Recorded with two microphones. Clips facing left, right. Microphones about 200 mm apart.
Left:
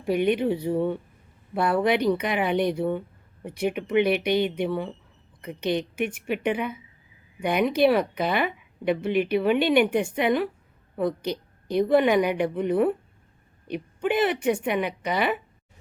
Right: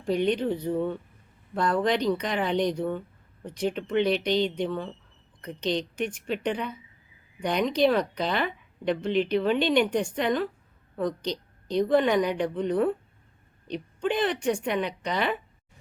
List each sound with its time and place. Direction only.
0.0 s a woman's voice: 10° left (ahead or behind)